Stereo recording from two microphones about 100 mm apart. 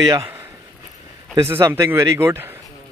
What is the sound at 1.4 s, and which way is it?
A man's voice, 30° right (ahead or behind).